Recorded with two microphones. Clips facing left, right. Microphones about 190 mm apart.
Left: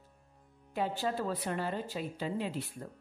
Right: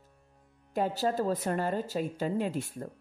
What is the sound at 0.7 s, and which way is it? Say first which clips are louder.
Speech: right 4 dB; 45° right (ahead or behind).